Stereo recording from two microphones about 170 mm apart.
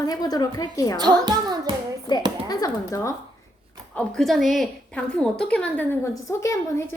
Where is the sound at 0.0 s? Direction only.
25° left (ahead or behind).